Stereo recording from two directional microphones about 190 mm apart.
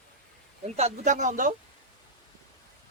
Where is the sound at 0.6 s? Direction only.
35° right (ahead or behind).